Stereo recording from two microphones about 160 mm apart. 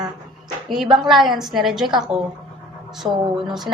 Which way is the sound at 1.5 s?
5° right (ahead or behind).